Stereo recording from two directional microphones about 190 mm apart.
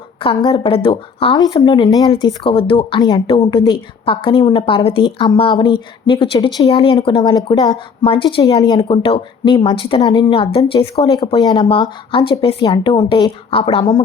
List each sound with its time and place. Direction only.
0.2 s speech: 25° left (ahead or behind)